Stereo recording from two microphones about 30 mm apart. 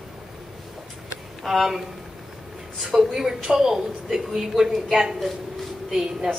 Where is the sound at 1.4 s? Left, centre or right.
Centre.